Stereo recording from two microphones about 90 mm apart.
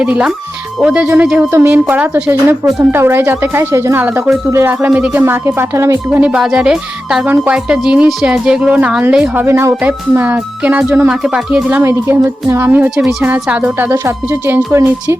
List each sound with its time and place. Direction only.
0.0 s a woman's voice: 10° right (ahead or behind)
1.0 s speech: 20° right (ahead or behind)
2.9 s speech: 25° right (ahead or behind)
5.2 s speech: 30° right (ahead or behind)
6.1 s a woman's voice: 15° right (ahead or behind)
9.5 s speech: 30° right (ahead or behind)
9.8 s speech: 20° right (ahead or behind)
11.1 s a woman's voice: 5° right (ahead or behind)
11.8 s speech: 30° right (ahead or behind)